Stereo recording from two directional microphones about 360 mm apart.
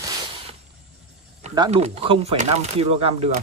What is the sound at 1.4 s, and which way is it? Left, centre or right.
Speech, centre.